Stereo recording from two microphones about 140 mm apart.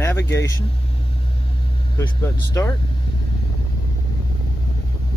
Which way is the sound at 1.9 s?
25° left (ahead or behind).